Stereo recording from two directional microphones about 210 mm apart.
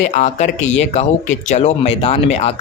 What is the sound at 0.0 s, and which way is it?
A man's voice, 35° left (ahead or behind).